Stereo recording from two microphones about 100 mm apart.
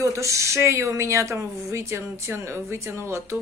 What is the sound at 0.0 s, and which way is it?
Speech, 30° right (ahead or behind).